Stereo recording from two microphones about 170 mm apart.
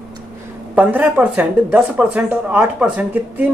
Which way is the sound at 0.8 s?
10° right (ahead or behind).